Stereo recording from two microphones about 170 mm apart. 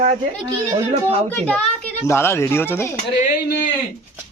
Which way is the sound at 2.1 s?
15° left (ahead or behind).